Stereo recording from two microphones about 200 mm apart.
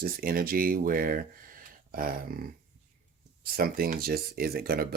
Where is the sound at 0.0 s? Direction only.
45° right (ahead or behind).